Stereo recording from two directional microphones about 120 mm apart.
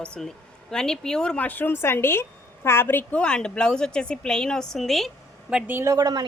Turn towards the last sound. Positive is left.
turn(degrees=-35)  # may be behind; listen again after turning